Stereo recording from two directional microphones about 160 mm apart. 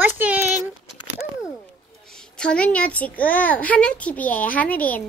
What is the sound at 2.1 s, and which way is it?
A child's voice, 5° left (ahead or behind).